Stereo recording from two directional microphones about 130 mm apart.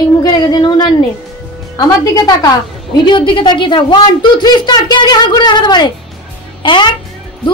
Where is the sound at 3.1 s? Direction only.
40° left (ahead or behind).